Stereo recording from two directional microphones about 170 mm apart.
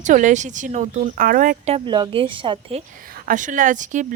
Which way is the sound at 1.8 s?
25° right (ahead or behind).